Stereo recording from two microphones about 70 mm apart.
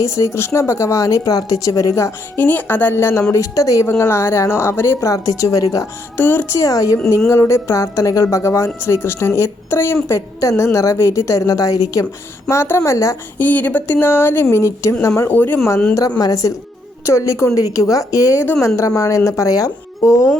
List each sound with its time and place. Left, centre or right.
0.0 s speech: left
2.3 s speech: left
3.3 s speech: left
3.8 s a woman's voice: left
5.0 s speech: left
6.1 s speech: left
6.5 s speech: left
7.3 s speech: left
12.5 s speech: left
13.4 s speech: left
14.5 s a woman's voice: left
15.3 s speech: left
16.0 s speech: left